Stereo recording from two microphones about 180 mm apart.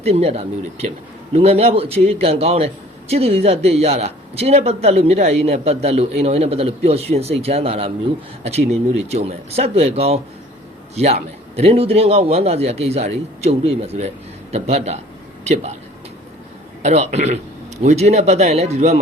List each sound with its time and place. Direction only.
0.0 s speech: 35° right (ahead or behind)
16.8 s speech: 40° right (ahead or behind)